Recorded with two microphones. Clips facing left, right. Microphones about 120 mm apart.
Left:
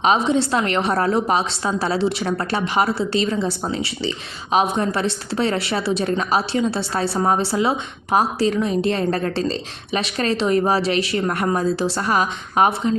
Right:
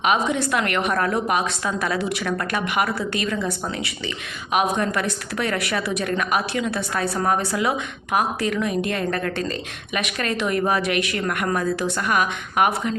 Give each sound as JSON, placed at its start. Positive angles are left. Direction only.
{"t": 0.0, "sound": "a woman's voice", "side_deg": 30}